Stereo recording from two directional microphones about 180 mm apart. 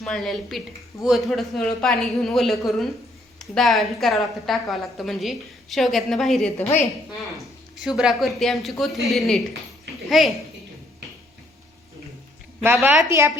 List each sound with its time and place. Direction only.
0.0 s a woman's voice: centre (ahead or behind)
7.9 s a woman's voice: centre (ahead or behind)
13.1 s speech: 15° right (ahead or behind)